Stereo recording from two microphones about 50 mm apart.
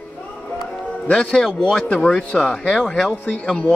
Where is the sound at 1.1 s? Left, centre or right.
Centre.